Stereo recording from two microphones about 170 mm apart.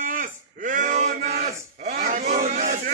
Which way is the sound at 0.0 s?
55° right (ahead or behind).